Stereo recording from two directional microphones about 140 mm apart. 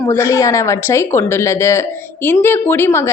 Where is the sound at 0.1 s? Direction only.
20° left (ahead or behind).